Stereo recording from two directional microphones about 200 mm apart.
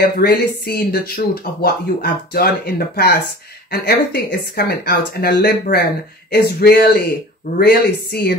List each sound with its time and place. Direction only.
0.0 s speech: 50° left (ahead or behind)